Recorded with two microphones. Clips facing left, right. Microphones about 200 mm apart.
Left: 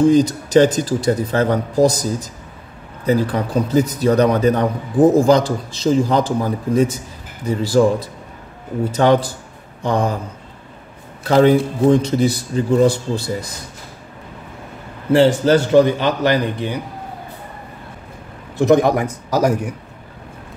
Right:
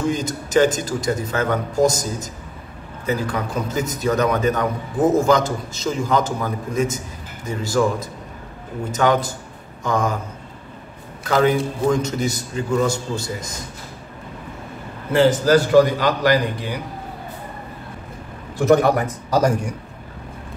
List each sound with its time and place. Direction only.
0.0 s a man's voice: 35° left (ahead or behind)
8.9 s a man's voice: 35° left (ahead or behind)
11.2 s a man's voice: 35° left (ahead or behind)
15.1 s a man's voice: 25° left (ahead or behind)
18.7 s a man's voice: 15° left (ahead or behind)